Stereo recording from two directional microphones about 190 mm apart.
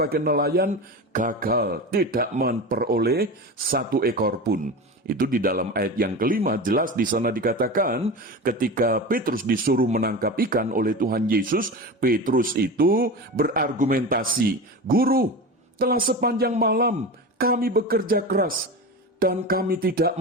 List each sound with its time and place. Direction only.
0.0 s a man's voice: 55° right (ahead or behind)
0.7 s a man's voice: 45° right (ahead or behind)